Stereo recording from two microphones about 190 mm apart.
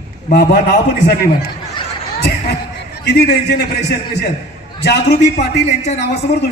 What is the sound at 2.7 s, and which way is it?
A man's voice, 60° left (ahead or behind).